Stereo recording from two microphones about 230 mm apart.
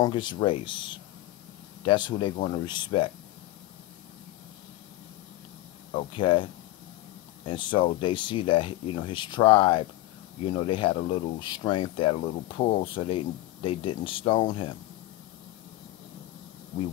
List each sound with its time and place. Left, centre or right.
0.0 s speech: centre
5.9 s speech: left